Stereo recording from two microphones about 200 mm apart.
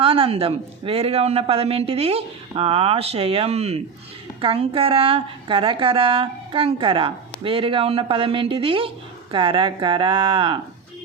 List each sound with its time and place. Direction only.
0.0 s a woman's voice: 25° right (ahead or behind)